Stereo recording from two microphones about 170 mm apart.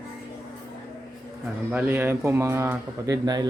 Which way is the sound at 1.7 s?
10° right (ahead or behind).